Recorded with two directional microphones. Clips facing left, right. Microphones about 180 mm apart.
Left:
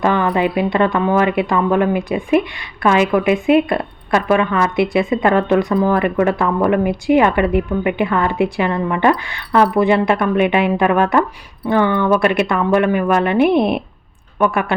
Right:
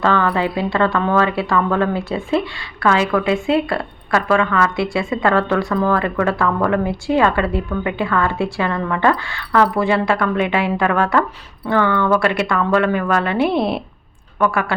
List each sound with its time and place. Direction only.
0.0 s a woman's voice: 15° left (ahead or behind)